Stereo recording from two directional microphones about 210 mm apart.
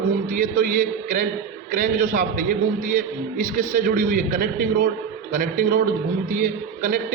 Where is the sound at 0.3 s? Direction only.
40° right (ahead or behind).